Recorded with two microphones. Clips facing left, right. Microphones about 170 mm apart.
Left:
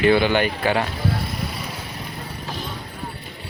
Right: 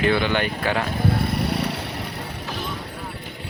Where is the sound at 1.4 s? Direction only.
70° right (ahead or behind).